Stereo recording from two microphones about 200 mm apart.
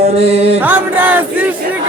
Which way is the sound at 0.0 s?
30° right (ahead or behind).